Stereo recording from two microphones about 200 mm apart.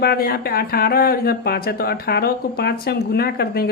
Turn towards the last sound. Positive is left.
turn(degrees=50)  # may be behind; listen again after turning